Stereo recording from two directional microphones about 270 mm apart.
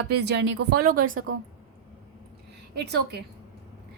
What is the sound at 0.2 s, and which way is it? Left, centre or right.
A woman's voice, right.